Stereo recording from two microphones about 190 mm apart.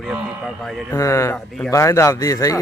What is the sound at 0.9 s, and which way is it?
Speech, 15° left (ahead or behind).